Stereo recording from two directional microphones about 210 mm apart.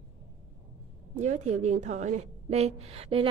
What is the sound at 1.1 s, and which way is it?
A woman's voice, 35° right (ahead or behind).